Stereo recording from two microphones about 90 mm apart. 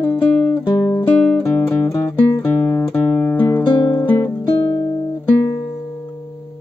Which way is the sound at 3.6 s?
50° left (ahead or behind).